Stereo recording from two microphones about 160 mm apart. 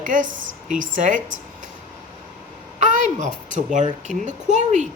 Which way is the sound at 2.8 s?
50° right (ahead or behind).